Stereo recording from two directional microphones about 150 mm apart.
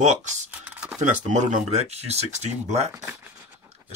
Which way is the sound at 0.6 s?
10° right (ahead or behind).